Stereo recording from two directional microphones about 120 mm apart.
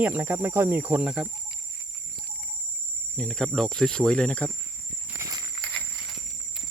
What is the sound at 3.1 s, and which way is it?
Cricket, 5° left (ahead or behind).